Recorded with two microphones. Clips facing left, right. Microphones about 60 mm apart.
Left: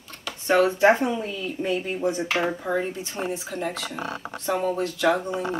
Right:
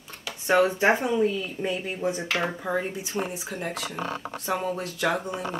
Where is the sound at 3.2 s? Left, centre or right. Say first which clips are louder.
Left 4 dB; centre.